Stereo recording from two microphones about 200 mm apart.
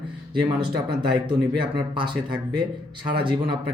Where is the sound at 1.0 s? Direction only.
25° right (ahead or behind).